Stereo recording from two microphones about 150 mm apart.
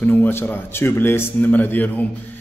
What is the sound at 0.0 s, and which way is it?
A man's voice, 10° left (ahead or behind).